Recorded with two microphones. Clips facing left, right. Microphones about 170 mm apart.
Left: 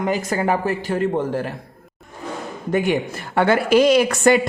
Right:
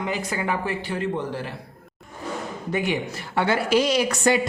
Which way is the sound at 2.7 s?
50° left (ahead or behind).